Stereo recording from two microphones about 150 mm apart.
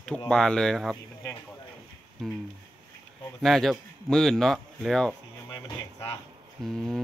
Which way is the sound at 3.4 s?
Centre (ahead or behind).